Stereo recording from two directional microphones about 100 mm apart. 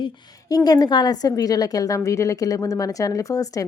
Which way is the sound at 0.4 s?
40° left (ahead or behind).